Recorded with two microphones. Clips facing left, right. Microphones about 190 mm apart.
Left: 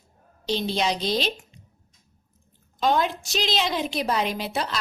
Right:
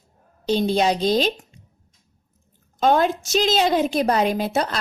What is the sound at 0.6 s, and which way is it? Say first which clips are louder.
Speech: right 7 dB; 45° right (ahead or behind).